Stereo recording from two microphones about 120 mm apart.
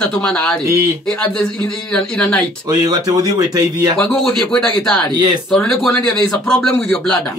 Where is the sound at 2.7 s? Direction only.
30° right (ahead or behind).